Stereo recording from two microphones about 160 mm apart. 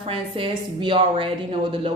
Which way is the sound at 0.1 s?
30° right (ahead or behind).